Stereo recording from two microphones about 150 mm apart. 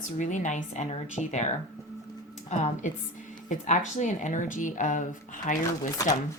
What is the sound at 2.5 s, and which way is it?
Speech, 50° left (ahead or behind).